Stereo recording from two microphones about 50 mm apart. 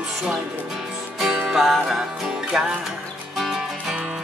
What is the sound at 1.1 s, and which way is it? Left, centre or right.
Music, centre.